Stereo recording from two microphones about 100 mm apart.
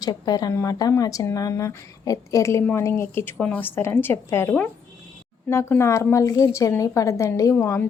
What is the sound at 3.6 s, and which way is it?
A woman's voice, 20° left (ahead or behind).